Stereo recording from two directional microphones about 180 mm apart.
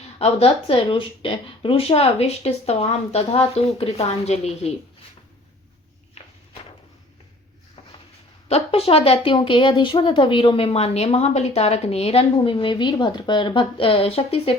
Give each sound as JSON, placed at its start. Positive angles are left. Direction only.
{"t": 0.2, "sound": "a woman's voice", "side_deg": 35}
{"t": 6.2, "sound": "walk", "side_deg": 35}
{"t": 8.4, "sound": "a woman's voice", "side_deg": 35}